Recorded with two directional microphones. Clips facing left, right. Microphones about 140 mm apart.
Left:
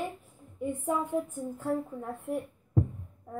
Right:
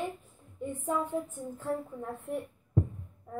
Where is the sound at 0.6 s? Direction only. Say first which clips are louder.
Left 2 dB; 15° left (ahead or behind).